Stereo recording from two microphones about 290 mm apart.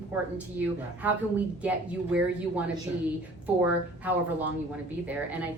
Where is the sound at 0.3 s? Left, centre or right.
Centre.